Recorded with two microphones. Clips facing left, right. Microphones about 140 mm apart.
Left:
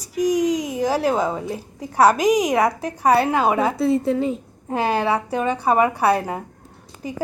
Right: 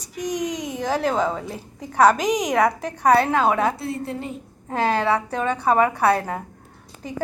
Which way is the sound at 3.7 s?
90° left.